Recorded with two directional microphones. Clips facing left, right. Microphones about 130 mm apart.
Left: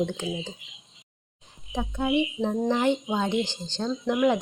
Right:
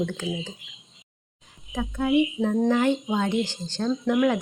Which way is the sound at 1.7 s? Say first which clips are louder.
Right 3 dB; 20° left (ahead or behind).